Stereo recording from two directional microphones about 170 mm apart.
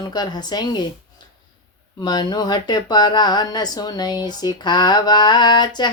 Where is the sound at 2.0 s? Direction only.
25° left (ahead or behind).